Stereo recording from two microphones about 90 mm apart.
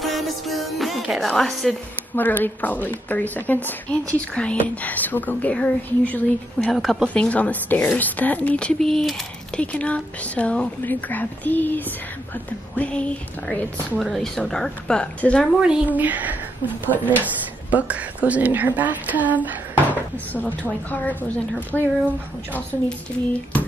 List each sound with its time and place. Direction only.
0.0 s music: centre (ahead or behind)
1.0 s speech: centre (ahead or behind)
2.1 s a woman's voice: 20° left (ahead or behind)
6.7 s speech: centre (ahead or behind)
7.2 s speech: 15° left (ahead or behind)
9.6 s speech: 15° left (ahead or behind)
13.9 s speech: centre (ahead or behind)
16.0 s speech: 20° right (ahead or behind)
20.3 s a woman's voice: 20° left (ahead or behind)